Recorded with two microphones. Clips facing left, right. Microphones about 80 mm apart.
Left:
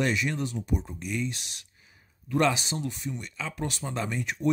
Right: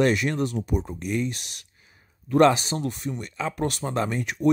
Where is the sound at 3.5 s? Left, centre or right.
Right.